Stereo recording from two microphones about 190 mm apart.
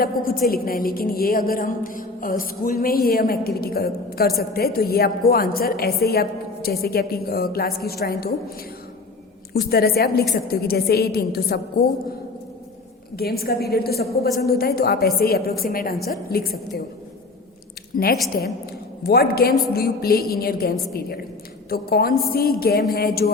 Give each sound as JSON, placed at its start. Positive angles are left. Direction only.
{"t": 0.0, "sound": "a woman's voice", "side_deg": 50}
{"t": 13.1, "sound": "a woman's voice", "side_deg": 55}
{"t": 17.9, "sound": "a woman's voice", "side_deg": 50}